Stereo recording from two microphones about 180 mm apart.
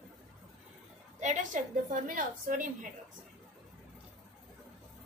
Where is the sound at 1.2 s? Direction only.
45° right (ahead or behind).